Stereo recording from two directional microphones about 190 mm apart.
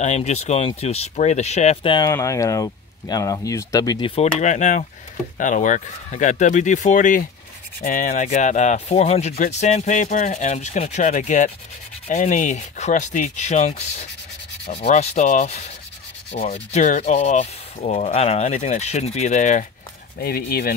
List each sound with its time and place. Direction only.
0.0 s speech: 35° left (ahead or behind)
4.4 s sanding: 40° left (ahead or behind)
20.2 s speech: 55° left (ahead or behind)